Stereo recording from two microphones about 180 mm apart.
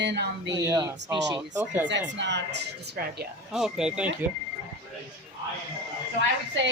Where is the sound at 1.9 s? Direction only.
75° right (ahead or behind).